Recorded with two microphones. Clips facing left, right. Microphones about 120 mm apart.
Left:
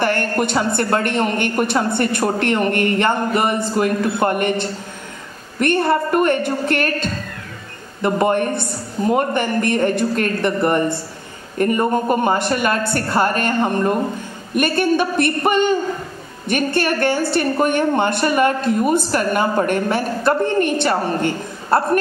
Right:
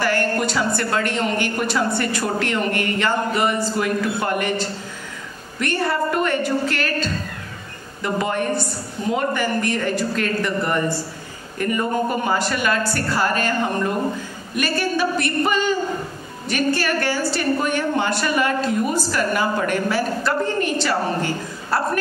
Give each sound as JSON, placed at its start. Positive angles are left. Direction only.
{"t": 0.0, "sound": "a woman's voice", "side_deg": 55}
{"t": 3.7, "sound": "speech", "side_deg": 45}
{"t": 5.9, "sound": "a woman's voice", "side_deg": 50}
{"t": 11.5, "sound": "a woman's voice", "side_deg": 40}